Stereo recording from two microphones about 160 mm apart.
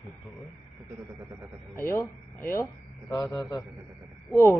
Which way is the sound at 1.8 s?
20° left (ahead or behind).